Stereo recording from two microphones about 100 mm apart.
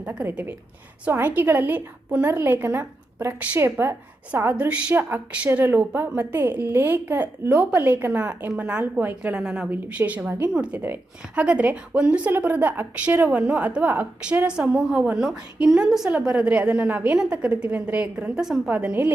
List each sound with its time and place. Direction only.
0.0 s a woman's voice: 15° right (ahead or behind)
4.5 s a woman's voice: 10° right (ahead or behind)
18.7 s a woman's voice: 15° right (ahead or behind)